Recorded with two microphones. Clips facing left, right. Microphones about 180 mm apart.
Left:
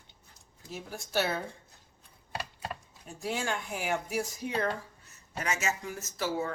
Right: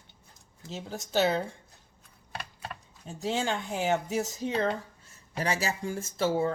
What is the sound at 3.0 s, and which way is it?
Speech, 25° right (ahead or behind).